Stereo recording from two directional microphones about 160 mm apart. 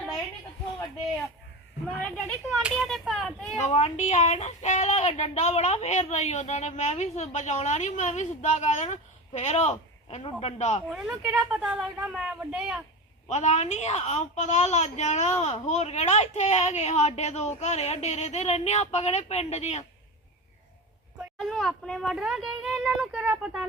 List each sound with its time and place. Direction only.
1.9 s speech: 5° left (ahead or behind)
3.7 s speech: 40° left (ahead or behind)
10.8 s speech: 5° right (ahead or behind)
13.2 s speech: 45° left (ahead or behind)
21.2 s speech: centre (ahead or behind)